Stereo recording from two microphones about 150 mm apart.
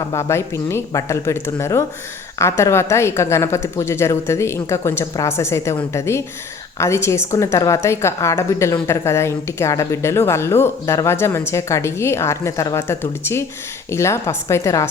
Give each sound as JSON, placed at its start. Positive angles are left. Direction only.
{"t": 0.1, "sound": "a woman's voice", "side_deg": 20}